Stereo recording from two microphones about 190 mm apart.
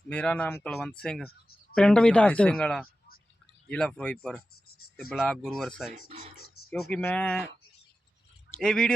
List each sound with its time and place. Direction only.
0.1 s speech: 5° left (ahead or behind)
6.1 s speech: 35° right (ahead or behind)
6.6 s a sound: 55° left (ahead or behind)
6.9 s speech: 10° left (ahead or behind)
8.5 s speech: 5° left (ahead or behind)